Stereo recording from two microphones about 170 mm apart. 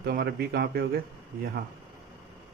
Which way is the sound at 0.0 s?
65° right (ahead or behind).